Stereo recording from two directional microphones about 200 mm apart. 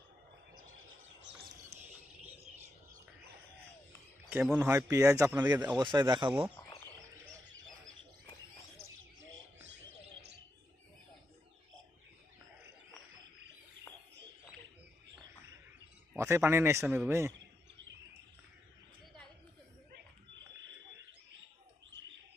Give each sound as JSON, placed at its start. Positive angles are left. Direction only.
{"t": 4.3, "sound": "speech", "side_deg": -10}
{"t": 4.7, "sound": "a man's voice", "side_deg": -15}
{"t": 16.1, "sound": "speech", "side_deg": -15}